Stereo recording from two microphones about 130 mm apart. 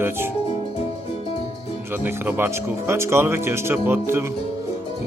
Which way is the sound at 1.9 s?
15° right (ahead or behind).